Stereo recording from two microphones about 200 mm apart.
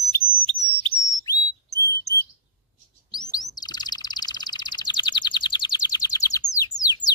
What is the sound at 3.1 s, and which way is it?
Chirp, 20° left (ahead or behind).